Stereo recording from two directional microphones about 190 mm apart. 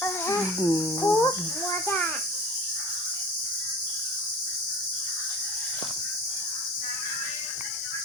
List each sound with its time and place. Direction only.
0.0 s cricket: 15° left (ahead or behind)